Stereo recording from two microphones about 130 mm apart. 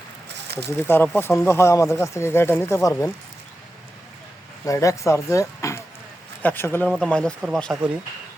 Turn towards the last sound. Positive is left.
turn(degrees=5)  # may be behind; listen again after turning